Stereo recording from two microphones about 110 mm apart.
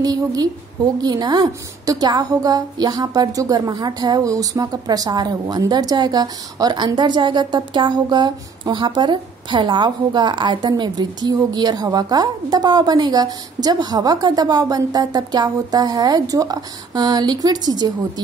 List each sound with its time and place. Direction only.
0.0 s a woman's voice: 35° right (ahead or behind)